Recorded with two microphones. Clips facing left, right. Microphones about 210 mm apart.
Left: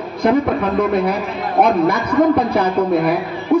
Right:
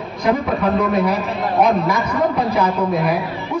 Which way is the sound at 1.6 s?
60° left (ahead or behind).